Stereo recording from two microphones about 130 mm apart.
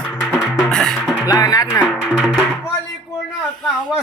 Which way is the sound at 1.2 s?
30° left (ahead or behind).